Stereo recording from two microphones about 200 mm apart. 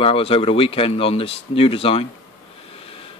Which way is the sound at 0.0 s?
30° left (ahead or behind).